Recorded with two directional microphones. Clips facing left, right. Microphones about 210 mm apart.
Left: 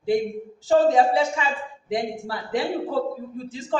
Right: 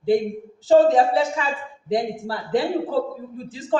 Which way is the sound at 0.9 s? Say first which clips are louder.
Right 1 dB; centre (ahead or behind).